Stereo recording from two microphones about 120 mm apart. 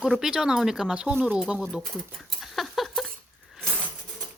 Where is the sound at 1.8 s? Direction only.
5° left (ahead or behind).